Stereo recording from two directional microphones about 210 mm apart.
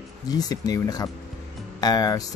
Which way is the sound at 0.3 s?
20° left (ahead or behind).